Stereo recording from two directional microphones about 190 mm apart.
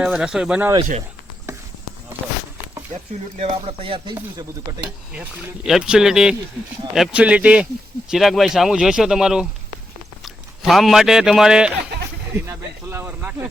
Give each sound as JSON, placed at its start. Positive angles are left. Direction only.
{"t": 0.0, "sound": "speech", "side_deg": -5}
{"t": 3.3, "sound": "speech", "side_deg": -35}
{"t": 5.6, "sound": "a man's voice", "side_deg": -5}